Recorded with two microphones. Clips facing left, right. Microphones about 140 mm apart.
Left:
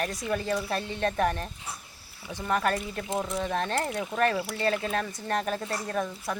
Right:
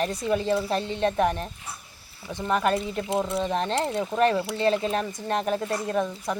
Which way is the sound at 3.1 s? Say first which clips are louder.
Right 3 dB; 10° right (ahead or behind).